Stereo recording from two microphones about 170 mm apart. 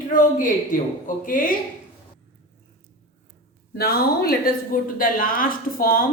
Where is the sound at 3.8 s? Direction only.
65° left (ahead or behind).